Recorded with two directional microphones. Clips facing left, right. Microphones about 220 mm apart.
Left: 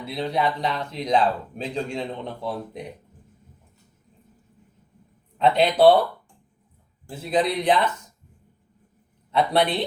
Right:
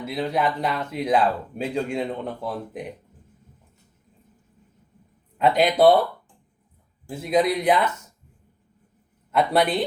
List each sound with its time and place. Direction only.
0.0 s speech: 5° right (ahead or behind)
5.4 s speech: 10° right (ahead or behind)
7.1 s speech: 10° right (ahead or behind)
9.3 s a man's voice: 5° right (ahead or behind)